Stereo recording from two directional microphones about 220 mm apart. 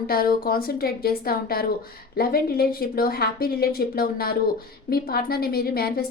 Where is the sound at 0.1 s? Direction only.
40° left (ahead or behind).